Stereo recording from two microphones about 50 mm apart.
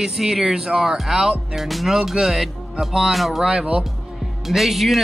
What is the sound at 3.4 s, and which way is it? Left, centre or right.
Speech, centre.